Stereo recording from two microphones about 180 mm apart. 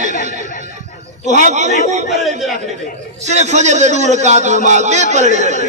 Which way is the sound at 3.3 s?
40° right (ahead or behind).